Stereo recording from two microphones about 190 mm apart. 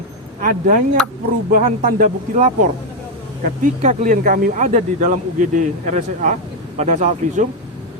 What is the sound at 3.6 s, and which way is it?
A man's voice, 45° right (ahead or behind).